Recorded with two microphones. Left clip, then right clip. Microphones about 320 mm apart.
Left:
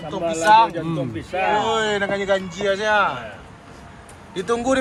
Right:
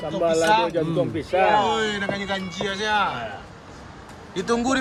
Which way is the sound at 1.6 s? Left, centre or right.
Centre.